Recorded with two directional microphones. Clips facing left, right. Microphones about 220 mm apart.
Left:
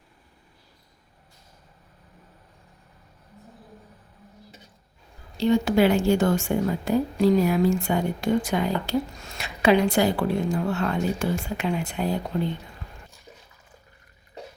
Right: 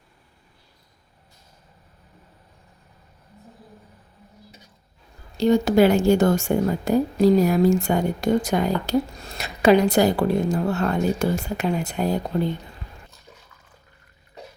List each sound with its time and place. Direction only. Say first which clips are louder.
5.4 s a woman's voice: right 3 dB; 40° right (ahead or behind)